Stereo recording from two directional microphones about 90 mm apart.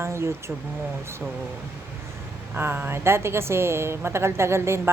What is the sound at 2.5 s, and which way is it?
A woman's voice, 20° right (ahead or behind).